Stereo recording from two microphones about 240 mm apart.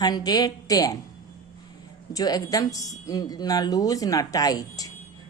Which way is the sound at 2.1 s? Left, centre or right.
Centre.